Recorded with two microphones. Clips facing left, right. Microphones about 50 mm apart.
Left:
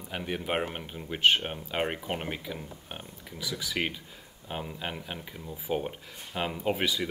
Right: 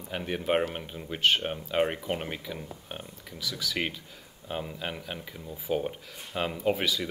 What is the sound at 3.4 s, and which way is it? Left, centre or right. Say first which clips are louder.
Speech: right 1 dB; left.